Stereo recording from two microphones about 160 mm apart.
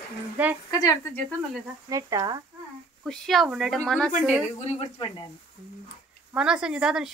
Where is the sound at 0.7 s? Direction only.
20° left (ahead or behind).